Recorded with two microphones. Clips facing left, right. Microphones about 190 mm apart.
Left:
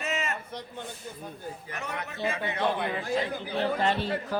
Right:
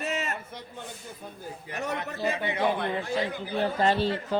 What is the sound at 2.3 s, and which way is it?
Speech, 15° right (ahead or behind).